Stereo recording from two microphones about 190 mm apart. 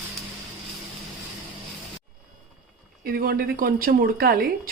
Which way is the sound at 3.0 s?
55° right (ahead or behind).